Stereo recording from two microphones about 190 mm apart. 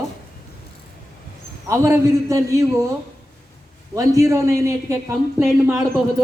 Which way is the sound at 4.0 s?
15° right (ahead or behind).